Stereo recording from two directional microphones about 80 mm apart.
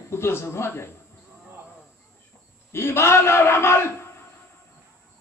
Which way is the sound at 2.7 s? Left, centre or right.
Left.